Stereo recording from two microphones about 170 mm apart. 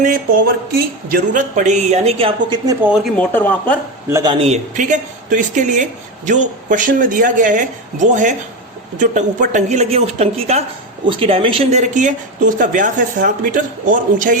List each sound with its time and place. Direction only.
0.0 s speech: 55° right (ahead or behind); by 2.6 s 35° right (ahead or behind)
2.8 s speech: 5° right (ahead or behind)
3.2 s speech: 10° left (ahead or behind)
4.1 s a man's voice: 25° right (ahead or behind)
4.4 s a woman's voice: 40° right (ahead or behind)